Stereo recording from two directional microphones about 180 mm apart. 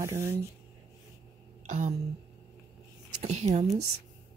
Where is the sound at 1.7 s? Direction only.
35° right (ahead or behind).